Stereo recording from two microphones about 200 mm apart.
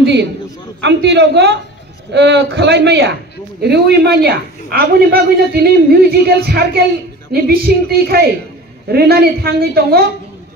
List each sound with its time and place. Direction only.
0.0 s a man's voice: 60° right (ahead or behind)